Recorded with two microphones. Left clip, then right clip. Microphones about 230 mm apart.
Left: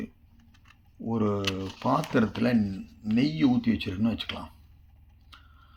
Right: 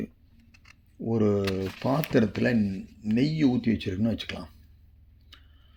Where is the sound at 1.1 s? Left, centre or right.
Right.